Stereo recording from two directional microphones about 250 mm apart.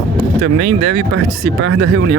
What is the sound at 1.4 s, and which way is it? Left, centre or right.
Speech, right.